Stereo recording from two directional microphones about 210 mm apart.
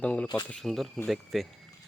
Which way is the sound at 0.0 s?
5° left (ahead or behind).